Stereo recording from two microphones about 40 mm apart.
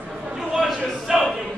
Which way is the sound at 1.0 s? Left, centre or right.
Centre.